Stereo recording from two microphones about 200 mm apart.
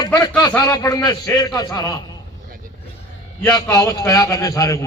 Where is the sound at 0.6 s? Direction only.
20° left (ahead or behind).